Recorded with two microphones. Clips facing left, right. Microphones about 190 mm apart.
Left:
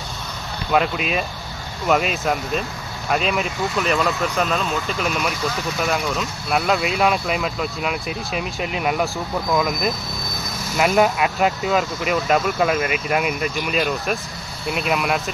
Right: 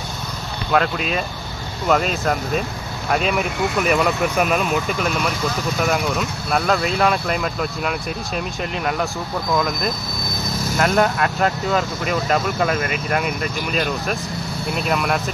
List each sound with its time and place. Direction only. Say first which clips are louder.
0.7 s speech: even; 10° left (ahead or behind)
4.4 s speech: right 3 dB; 15° right (ahead or behind)
4.9 s speech: right 1 dB; centre (ahead or behind)